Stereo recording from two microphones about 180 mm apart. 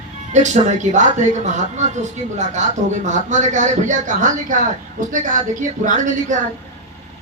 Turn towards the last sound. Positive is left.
turn(degrees=-45)  # may be behind; listen again after turning